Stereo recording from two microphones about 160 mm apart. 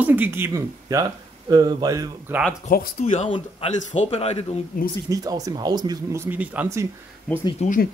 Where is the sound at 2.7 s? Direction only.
50° left (ahead or behind).